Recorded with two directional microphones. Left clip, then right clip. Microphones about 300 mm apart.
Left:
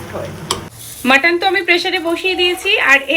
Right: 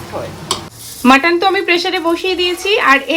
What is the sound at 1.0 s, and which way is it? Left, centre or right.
A woman's voice, right.